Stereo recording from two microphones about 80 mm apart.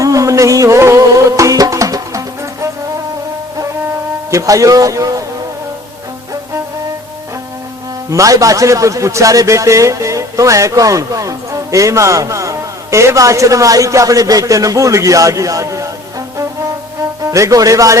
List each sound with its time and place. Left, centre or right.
0.0 s music: right
4.3 s a man's voice: right
8.1 s a man's voice: right
17.3 s a man's voice: right